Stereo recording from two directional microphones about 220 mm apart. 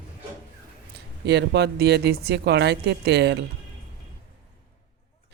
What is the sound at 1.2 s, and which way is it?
Speech, 50° right (ahead or behind).